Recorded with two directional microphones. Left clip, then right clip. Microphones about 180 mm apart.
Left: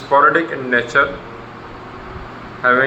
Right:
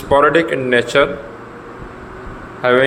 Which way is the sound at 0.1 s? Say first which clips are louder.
Right 1 dB; 75° right (ahead or behind).